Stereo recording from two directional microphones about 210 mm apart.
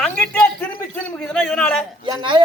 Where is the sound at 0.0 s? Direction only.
5° left (ahead or behind).